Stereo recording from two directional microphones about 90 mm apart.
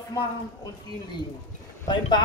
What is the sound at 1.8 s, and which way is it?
Speech, 55° left (ahead or behind).